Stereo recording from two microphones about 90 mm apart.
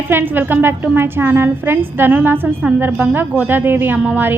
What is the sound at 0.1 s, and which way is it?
A woman's voice, 20° right (ahead or behind).